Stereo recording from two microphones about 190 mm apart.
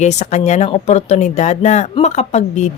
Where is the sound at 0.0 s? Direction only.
35° left (ahead or behind).